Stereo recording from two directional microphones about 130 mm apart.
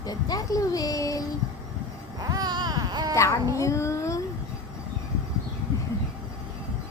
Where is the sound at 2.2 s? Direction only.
30° right (ahead or behind).